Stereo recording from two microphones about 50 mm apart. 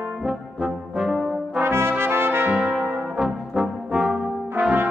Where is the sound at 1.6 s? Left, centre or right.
Right.